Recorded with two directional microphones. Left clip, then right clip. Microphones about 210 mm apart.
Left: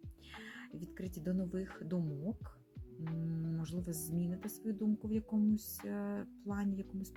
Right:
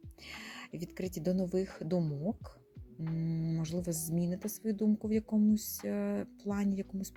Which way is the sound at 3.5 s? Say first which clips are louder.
Right 7 dB; 20° right (ahead or behind).